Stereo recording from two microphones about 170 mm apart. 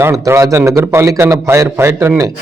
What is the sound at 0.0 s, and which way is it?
A man's voice, 15° right (ahead or behind).